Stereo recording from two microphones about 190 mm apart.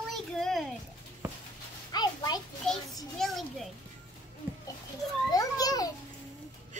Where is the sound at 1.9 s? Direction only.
20° left (ahead or behind).